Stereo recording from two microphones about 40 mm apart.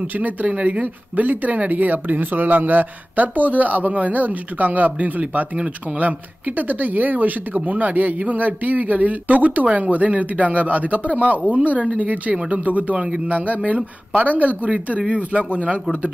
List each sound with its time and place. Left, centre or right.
0.1 s speech: right